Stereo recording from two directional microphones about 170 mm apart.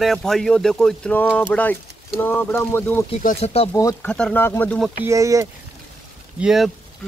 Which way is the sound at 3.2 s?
40° left (ahead or behind).